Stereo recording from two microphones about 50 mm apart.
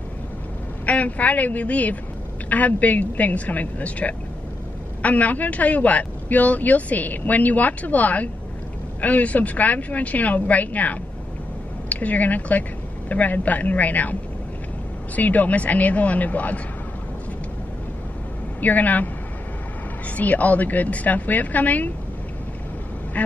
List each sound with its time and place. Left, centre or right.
0.8 s speech: left
15.1 s speech: left
18.6 s speech: left
20.2 s speech: left
23.2 s quack: left